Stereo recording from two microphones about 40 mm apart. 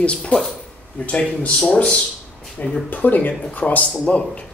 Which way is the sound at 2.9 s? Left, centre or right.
Left.